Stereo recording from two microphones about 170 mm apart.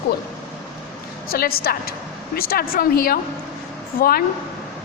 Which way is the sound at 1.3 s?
60° left (ahead or behind).